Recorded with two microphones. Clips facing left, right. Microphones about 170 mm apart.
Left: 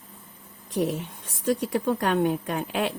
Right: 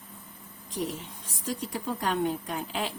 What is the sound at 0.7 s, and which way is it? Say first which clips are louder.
A woman's voice: left 7 dB; 60° left (ahead or behind).